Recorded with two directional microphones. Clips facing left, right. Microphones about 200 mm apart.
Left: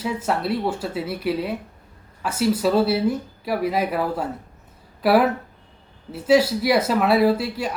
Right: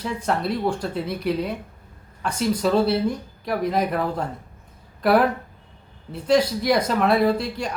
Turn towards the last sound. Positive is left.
turn(degrees=5)  # may be behind; listen again after turning